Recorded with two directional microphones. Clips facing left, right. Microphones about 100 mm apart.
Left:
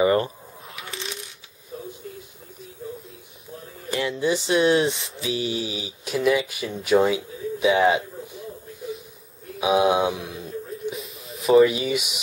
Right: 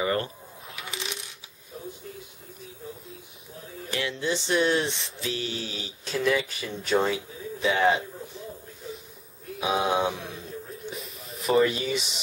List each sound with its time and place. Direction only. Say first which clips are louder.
0.0 s a sound: left 7 dB; 20° left (ahead or behind)
0.7 s coin: left 1 dB; centre (ahead or behind)
3.9 s speech: left 5 dB; centre (ahead or behind)
9.6 s speech: left 5 dB; 10° left (ahead or behind)
10.9 s a sound: left 5 dB; centre (ahead or behind)
11.7 s speech: left 4 dB; 10° left (ahead or behind)